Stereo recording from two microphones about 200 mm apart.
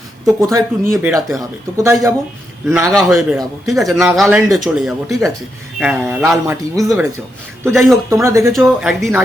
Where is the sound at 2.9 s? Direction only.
Centre (ahead or behind).